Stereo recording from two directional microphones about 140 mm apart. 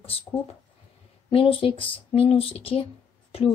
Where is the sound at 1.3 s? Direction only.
40° left (ahead or behind).